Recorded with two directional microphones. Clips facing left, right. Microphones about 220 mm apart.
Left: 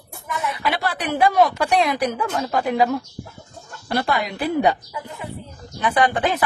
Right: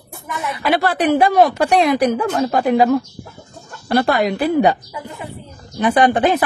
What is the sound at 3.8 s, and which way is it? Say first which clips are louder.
Speech: right 7 dB; 70° right (ahead or behind).